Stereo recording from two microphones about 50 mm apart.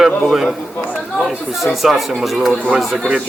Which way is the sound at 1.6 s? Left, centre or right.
Centre.